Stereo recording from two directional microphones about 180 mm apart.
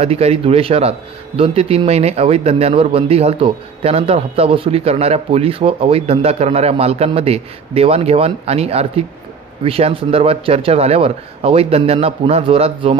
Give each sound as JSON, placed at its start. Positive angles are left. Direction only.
{"t": 0.0, "sound": "speech", "side_deg": -35}